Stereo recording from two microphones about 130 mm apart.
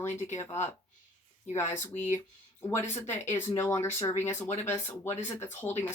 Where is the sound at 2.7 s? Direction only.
20° left (ahead or behind).